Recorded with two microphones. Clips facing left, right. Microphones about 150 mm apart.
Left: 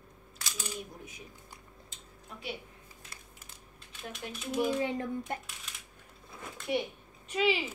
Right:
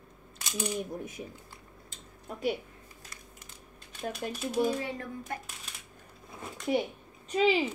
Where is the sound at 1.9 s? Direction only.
50° right (ahead or behind).